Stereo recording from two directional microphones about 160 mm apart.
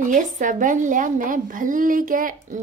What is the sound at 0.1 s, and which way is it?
A woman's voice, 55° right (ahead or behind).